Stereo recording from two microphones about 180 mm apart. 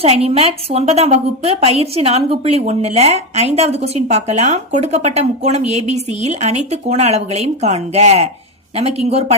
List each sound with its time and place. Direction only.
0.3 s a woman's voice: 35° right (ahead or behind)